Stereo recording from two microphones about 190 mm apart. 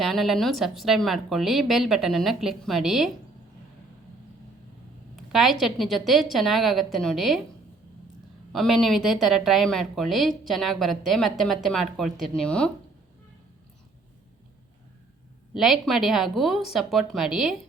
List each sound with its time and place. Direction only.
0.0 s a woman's voice: centre (ahead or behind)
5.1 s a woman's voice: centre (ahead or behind)
8.5 s a woman's voice: centre (ahead or behind)
15.5 s a woman's voice: centre (ahead or behind)